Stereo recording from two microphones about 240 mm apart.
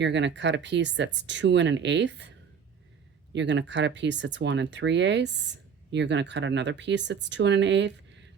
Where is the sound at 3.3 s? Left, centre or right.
Right.